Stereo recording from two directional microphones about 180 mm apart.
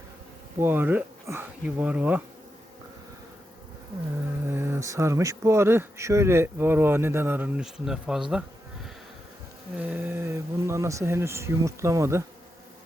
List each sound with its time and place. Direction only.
0.6 s speech: 10° right (ahead or behind)
4.4 s speech: 15° right (ahead or behind)
8.3 s insect: 5° right (ahead or behind)
9.7 s speech: 10° right (ahead or behind)